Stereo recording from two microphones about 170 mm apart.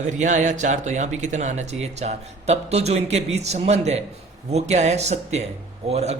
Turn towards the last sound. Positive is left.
turn(degrees=-40)  # may be behind; listen again after turning